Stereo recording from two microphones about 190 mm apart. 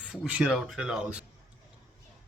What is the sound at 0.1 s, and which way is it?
Speech, 5° right (ahead or behind).